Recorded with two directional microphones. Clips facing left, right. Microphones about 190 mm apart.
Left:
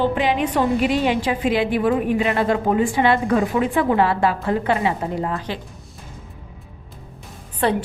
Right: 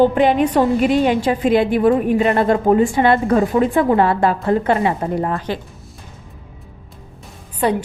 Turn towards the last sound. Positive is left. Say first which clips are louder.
# right 2 dB
turn(degrees=-10)  # may be behind; listen again after turning